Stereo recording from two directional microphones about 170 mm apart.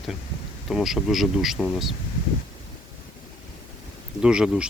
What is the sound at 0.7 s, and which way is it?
Speech, centre (ahead or behind).